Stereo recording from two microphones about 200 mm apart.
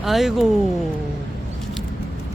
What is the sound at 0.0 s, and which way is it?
Speech, centre (ahead or behind).